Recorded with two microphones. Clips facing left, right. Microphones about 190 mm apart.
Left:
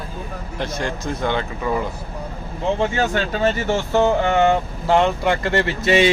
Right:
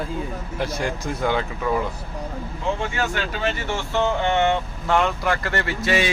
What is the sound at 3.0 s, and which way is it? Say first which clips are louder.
Speech: left 5 dB; 40° left (ahead or behind).